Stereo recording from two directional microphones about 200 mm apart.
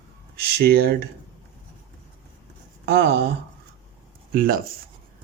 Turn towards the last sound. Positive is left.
turn(degrees=-45)  # may be behind; listen again after turning